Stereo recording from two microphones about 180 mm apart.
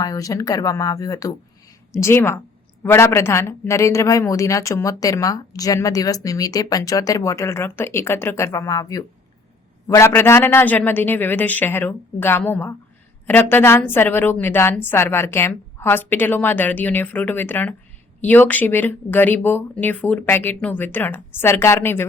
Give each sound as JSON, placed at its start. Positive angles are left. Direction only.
{"t": 0.0, "sound": "speech", "side_deg": 20}